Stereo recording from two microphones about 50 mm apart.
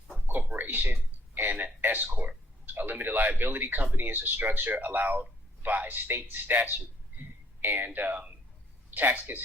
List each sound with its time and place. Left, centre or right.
0.6 s a man's voice: right
8.9 s a man's voice: right